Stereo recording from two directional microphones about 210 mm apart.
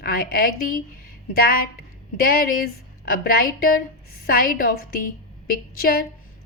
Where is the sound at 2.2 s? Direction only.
45° left (ahead or behind).